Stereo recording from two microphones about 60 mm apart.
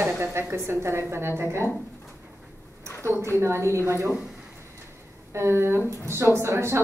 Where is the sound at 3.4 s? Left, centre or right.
Right.